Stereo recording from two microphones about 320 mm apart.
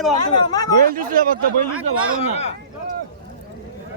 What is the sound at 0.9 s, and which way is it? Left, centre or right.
Speech, right.